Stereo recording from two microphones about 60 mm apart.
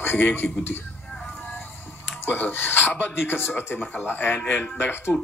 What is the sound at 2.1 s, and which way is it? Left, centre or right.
Speech, left.